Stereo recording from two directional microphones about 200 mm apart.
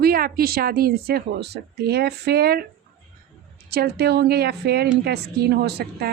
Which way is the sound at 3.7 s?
50° right (ahead or behind).